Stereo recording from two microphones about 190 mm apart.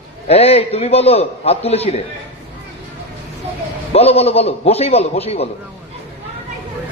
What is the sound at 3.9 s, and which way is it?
A man's voice, 30° left (ahead or behind).